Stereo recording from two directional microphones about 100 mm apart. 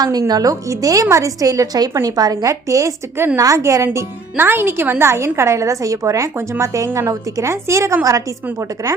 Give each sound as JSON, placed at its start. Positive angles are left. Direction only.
{"t": 0.0, "sound": "a woman's voice", "side_deg": -40}
{"t": 3.8, "sound": "speech", "side_deg": -20}